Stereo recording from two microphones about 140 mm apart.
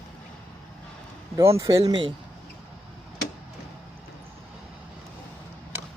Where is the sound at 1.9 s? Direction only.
35° right (ahead or behind).